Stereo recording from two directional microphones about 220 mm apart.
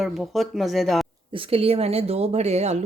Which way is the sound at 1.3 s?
25° right (ahead or behind).